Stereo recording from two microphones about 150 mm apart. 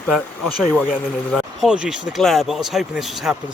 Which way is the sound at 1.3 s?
Centre (ahead or behind).